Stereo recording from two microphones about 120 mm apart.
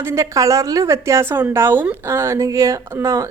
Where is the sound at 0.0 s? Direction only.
25° right (ahead or behind).